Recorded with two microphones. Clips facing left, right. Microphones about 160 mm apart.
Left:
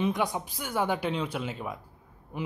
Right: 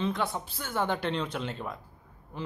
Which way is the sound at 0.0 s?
15° left (ahead or behind).